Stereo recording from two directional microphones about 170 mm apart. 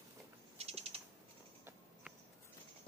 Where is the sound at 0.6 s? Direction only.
35° right (ahead or behind).